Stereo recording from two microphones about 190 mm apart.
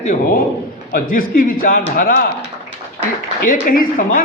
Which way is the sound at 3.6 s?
45° left (ahead or behind).